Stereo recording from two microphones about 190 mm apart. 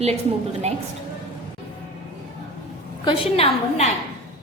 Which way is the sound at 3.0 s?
30° left (ahead or behind).